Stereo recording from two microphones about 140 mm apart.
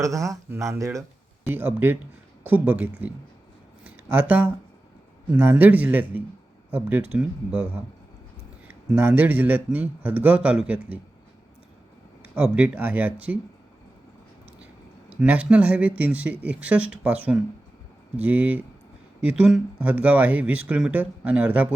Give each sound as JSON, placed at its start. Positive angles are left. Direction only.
{"t": 0.0, "sound": "speech", "side_deg": -25}
{"t": 8.6, "sound": "speech", "side_deg": -10}
{"t": 12.3, "sound": "speech", "side_deg": -10}
{"t": 15.1, "sound": "speech", "side_deg": -10}